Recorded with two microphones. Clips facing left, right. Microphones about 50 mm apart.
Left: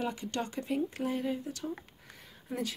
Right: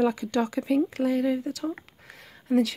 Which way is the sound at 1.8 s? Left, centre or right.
Right.